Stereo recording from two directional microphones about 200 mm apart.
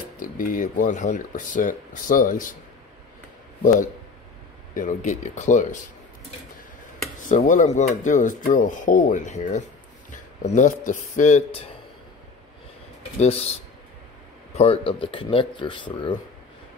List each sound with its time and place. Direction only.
0.2 s speech: 45° left (ahead or behind)
4.7 s speech: 40° left (ahead or behind)
7.2 s speech: 40° left (ahead or behind)
13.2 s speech: 30° left (ahead or behind)
14.5 s a sound: 30° left (ahead or behind)
14.9 s speech: 25° left (ahead or behind)